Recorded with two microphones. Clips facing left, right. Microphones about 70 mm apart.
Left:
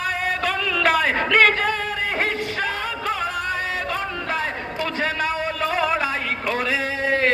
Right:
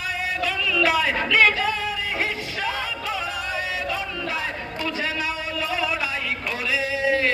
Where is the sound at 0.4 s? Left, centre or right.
Left.